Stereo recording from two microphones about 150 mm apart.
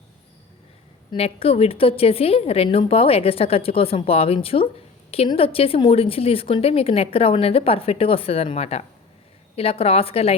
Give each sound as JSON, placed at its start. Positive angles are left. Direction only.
{"t": 1.1, "sound": "speech", "side_deg": 40}